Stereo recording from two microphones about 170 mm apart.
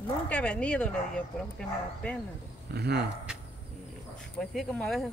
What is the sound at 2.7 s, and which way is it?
Speech, 75° right (ahead or behind).